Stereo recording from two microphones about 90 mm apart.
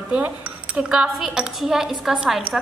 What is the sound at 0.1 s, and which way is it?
A woman's voice, 15° right (ahead or behind).